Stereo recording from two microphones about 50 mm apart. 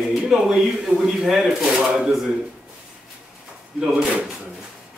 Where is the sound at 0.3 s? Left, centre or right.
Centre.